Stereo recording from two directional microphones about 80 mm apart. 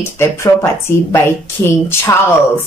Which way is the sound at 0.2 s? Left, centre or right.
Left.